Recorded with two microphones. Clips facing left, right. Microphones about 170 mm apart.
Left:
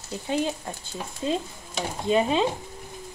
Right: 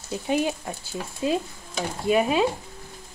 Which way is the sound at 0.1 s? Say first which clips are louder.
Right 2 dB; 15° right (ahead or behind).